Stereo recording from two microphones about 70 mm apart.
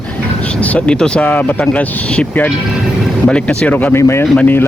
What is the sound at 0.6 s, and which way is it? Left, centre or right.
Speech, centre.